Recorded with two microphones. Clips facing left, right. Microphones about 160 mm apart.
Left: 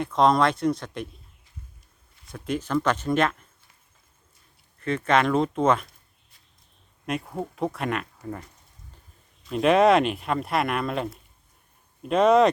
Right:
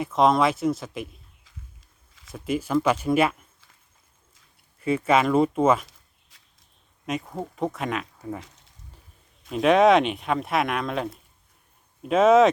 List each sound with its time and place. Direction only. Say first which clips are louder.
0.0 s speech: even; 5° right (ahead or behind)
2.3 s speech: right 2 dB; 5° right (ahead or behind)
4.8 s speech: right 1 dB; 5° right (ahead or behind)
6.3 s a sound: right 3 dB; 90° right
7.0 s speech: even; centre (ahead or behind)
9.5 s speech: right 1 dB; centre (ahead or behind)